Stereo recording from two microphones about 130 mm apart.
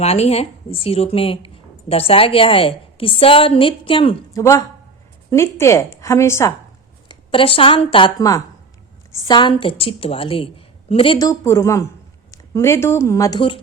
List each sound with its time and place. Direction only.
0.0 s a woman's voice: 50° left (ahead or behind)
4.4 s a woman's voice: 20° left (ahead or behind)
7.1 s a woman's voice: 45° left (ahead or behind)
9.1 s a woman's voice: 30° left (ahead or behind)
11.2 s a woman's voice: 25° left (ahead or behind)